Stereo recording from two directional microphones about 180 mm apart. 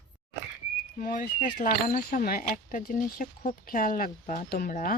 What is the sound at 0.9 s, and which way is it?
Speech, 50° left (ahead or behind).